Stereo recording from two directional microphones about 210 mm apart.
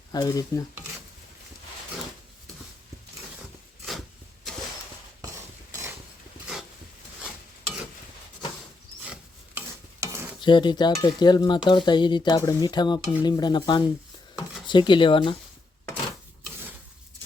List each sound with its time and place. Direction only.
0.1 s stir: 20° left (ahead or behind)
9.6 s stir: 10° right (ahead or behind)
10.4 s speech: 20° left (ahead or behind)